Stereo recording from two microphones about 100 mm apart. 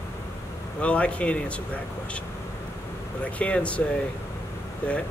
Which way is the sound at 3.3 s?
10° left (ahead or behind).